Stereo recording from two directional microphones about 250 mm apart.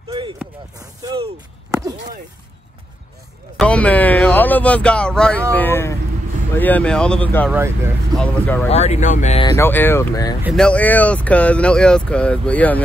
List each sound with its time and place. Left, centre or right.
0.1 s a sound: centre
3.5 s speech: centre
7.5 s speech: centre
8.6 s speech: left
9.5 s speech: centre
10.4 s speech: centre